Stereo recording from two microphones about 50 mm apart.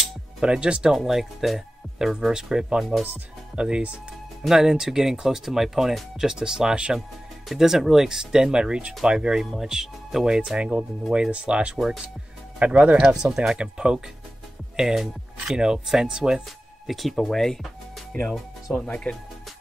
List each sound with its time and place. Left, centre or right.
0.4 s speech: centre
0.9 s speech: centre
4.4 s speech: centre
7.4 s speech: centre; by 12.9 s right
12.9 s speech: centre
16.8 s speech: centre
18.7 s speech: left